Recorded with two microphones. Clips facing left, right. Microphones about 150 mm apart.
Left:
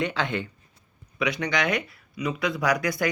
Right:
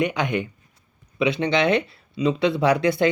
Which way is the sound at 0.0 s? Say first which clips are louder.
Right 4 dB; 15° right (ahead or behind).